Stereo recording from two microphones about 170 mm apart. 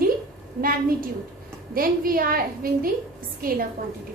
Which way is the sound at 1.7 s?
60° right (ahead or behind).